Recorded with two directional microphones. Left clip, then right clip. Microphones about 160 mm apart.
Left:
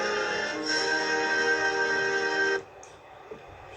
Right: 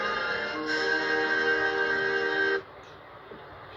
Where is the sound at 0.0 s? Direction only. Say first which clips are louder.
Left 1 dB; 20° left (ahead or behind).